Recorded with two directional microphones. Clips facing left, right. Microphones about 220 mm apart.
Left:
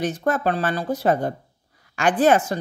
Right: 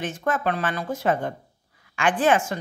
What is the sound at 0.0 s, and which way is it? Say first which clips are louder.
Speech: left 3 dB; 35° left (ahead or behind).